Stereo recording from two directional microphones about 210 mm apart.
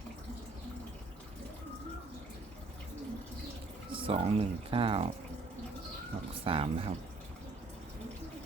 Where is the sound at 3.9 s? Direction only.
25° right (ahead or behind).